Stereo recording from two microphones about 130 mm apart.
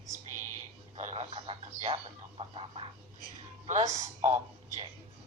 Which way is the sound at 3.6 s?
60° right (ahead or behind).